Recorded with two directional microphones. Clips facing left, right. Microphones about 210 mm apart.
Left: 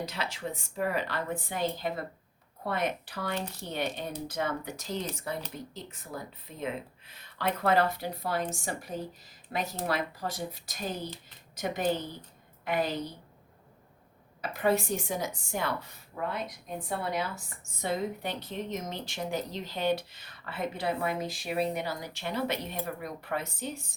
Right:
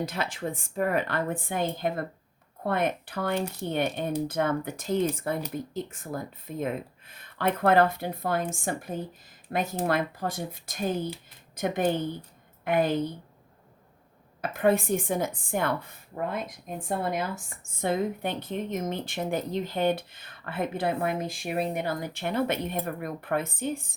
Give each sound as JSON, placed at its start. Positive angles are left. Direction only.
{"t": 0.0, "sound": "a woman's voice", "side_deg": -50}
{"t": 14.4, "sound": "a woman's voice", "side_deg": -50}